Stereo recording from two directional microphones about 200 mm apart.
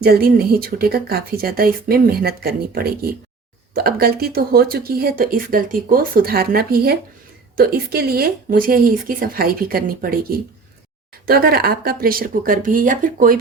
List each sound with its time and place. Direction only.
0.0 s speech: 50° right (ahead or behind)